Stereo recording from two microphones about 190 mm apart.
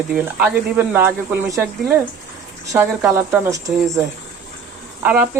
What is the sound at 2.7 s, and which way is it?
Speech, 10° right (ahead or behind).